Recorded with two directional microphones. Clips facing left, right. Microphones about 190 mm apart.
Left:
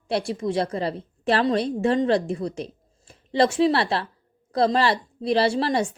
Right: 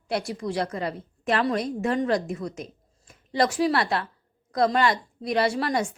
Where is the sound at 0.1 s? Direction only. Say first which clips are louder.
Left 4 dB; 25° left (ahead or behind).